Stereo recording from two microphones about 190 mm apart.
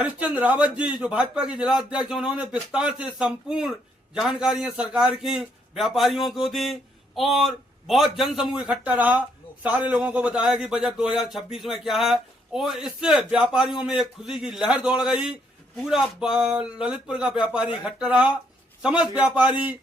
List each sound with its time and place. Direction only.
0.0 s a man's voice: 5° right (ahead or behind)